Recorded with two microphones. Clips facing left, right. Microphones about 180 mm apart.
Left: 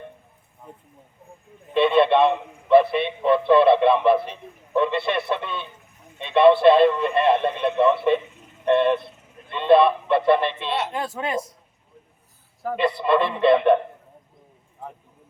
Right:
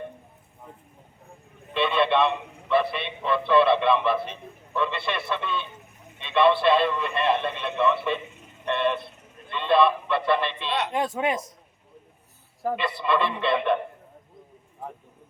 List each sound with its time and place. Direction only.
1.7 s a sound: 50° left (ahead or behind)
3.4 s speech: 50° left (ahead or behind)
9.5 s radio: 50° left (ahead or behind)
10.3 s speech: 50° left (ahead or behind)
10.7 s speech: 5° left (ahead or behind)
10.9 s speech: 25° right (ahead or behind)
12.7 s speech: 50° left (ahead or behind)